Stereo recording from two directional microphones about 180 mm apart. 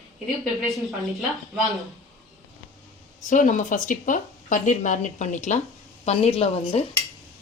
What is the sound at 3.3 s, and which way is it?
Speech, 45° left (ahead or behind).